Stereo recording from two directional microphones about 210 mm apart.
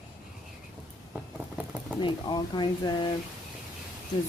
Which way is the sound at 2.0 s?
20° left (ahead or behind).